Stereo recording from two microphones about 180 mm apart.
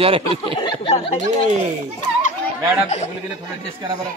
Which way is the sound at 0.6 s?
30° left (ahead or behind).